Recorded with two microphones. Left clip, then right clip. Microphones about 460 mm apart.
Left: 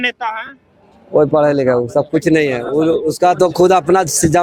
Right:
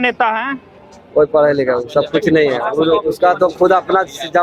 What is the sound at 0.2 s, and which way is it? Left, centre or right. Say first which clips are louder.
Speech: right 6 dB; centre.